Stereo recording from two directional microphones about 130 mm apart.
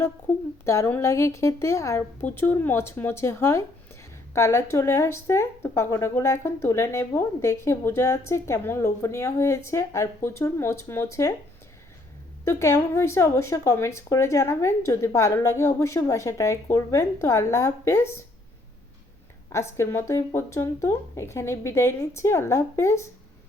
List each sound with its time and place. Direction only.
0.3 s a woman's voice: 10° left (ahead or behind)
12.5 s speech: 20° left (ahead or behind)
19.5 s speech: 20° left (ahead or behind)